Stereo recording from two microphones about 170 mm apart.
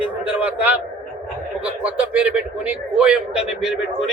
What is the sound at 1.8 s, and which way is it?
A man's voice, 5° right (ahead or behind).